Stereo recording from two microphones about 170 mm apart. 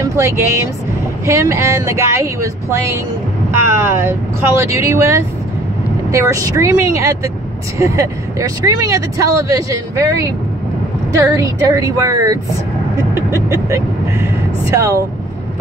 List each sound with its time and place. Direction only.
0.0 s speech: 15° right (ahead or behind)